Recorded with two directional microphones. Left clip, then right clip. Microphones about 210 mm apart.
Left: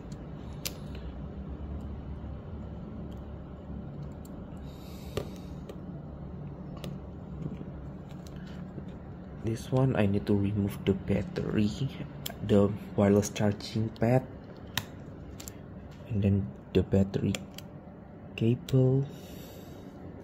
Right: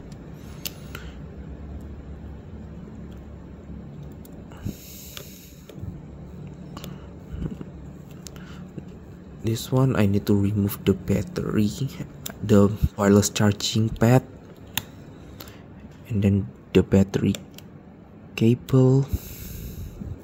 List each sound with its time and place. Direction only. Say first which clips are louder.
9.4 s speech: right 6 dB; 45° right (ahead or behind)
16.1 s speech: right 6 dB; 45° right (ahead or behind)
18.3 s speech: right 8 dB; 45° right (ahead or behind)